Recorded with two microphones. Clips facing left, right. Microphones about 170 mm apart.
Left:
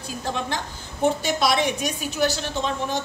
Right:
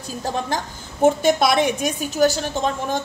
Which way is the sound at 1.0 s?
50° right (ahead or behind).